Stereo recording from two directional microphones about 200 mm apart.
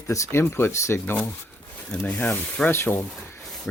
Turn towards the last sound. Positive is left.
turn(degrees=10)  # may be behind; listen again after turning